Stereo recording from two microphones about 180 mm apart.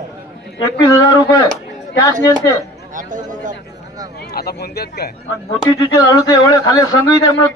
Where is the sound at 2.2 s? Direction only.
20° left (ahead or behind).